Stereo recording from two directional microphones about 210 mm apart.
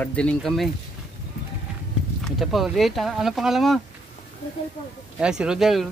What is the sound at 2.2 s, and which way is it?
Speech, centre (ahead or behind).